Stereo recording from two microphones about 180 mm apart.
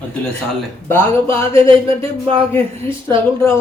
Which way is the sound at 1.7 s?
30° right (ahead or behind).